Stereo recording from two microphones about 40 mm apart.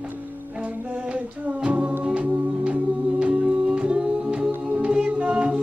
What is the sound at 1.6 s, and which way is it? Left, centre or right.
Music, right.